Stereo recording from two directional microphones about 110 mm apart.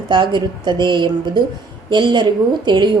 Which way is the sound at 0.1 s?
45° right (ahead or behind).